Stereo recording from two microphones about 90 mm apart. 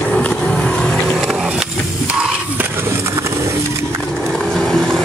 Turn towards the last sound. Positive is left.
turn(degrees=5)  # may be behind; listen again after turning